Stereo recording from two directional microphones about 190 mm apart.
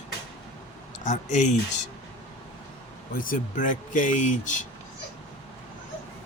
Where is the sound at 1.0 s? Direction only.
40° left (ahead or behind).